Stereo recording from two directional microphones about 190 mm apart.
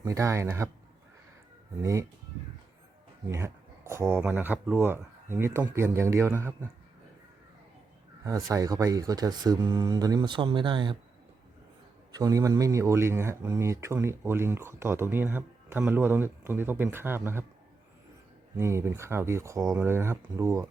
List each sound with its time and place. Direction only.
0.0 s speech: 15° right (ahead or behind)
1.8 s speech: 15° right (ahead or behind)
3.2 s speech: 15° right (ahead or behind)
8.2 s speech: 20° right (ahead or behind)
12.1 s speech: 20° right (ahead or behind)
18.5 s speech: 15° right (ahead or behind)